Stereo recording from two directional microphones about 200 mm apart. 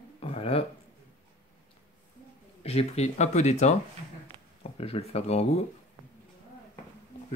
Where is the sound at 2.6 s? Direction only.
30° left (ahead or behind).